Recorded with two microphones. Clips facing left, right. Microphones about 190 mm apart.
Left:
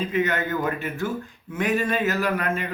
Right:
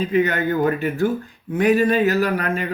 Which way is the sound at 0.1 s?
35° right (ahead or behind).